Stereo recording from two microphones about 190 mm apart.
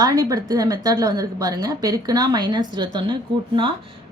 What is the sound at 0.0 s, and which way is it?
A woman's voice, 20° right (ahead or behind).